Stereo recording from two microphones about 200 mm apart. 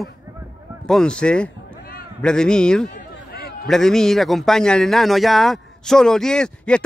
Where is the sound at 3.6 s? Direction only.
Centre (ahead or behind).